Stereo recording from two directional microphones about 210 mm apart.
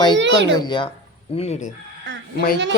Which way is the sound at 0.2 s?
60° right (ahead or behind).